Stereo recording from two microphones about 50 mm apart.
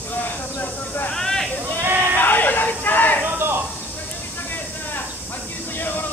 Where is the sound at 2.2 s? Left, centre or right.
Left.